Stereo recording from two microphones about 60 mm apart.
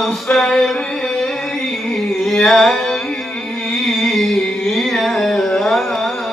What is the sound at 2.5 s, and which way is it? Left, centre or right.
Music, centre.